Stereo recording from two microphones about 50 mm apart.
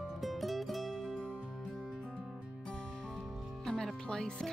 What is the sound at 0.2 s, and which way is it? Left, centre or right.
Music, centre.